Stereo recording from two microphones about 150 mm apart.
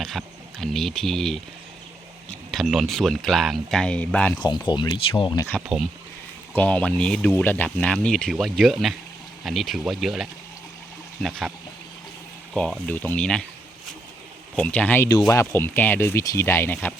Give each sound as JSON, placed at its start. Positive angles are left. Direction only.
{"t": 0.0, "sound": "speech", "side_deg": 0}
{"t": 2.5, "sound": "speech", "side_deg": 0}
{"t": 4.4, "sound": "speech", "side_deg": 30}
{"t": 5.6, "sound": "speech", "side_deg": -5}
{"t": 6.6, "sound": "speech", "side_deg": 5}
{"t": 12.5, "sound": "speech", "side_deg": 0}
{"t": 12.9, "sound": "speech", "side_deg": 10}
{"t": 14.5, "sound": "speech", "side_deg": 10}